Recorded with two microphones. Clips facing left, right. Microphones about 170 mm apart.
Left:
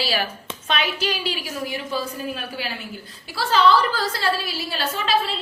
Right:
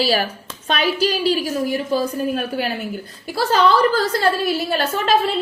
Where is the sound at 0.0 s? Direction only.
45° right (ahead or behind).